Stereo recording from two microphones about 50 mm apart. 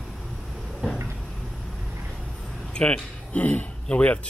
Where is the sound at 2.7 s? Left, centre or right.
Left.